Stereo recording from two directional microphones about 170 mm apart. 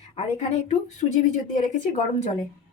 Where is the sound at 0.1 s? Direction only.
40° left (ahead or behind).